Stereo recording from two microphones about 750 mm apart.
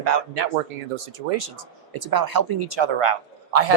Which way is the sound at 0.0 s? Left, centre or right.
Right.